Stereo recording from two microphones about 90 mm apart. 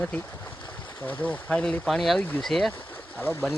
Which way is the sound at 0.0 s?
15° left (ahead or behind).